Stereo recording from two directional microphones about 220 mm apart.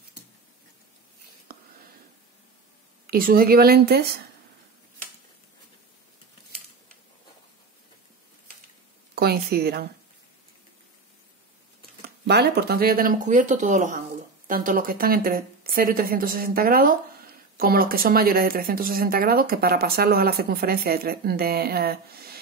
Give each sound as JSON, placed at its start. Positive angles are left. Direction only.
{"t": 1.5, "sound": "a sound", "side_deg": -45}
{"t": 3.1, "sound": "speech", "side_deg": -40}
{"t": 9.1, "sound": "a woman's voice", "side_deg": -45}
{"t": 12.3, "sound": "speech", "side_deg": -45}